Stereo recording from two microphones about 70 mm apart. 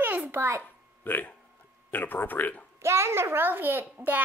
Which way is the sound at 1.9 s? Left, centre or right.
Left.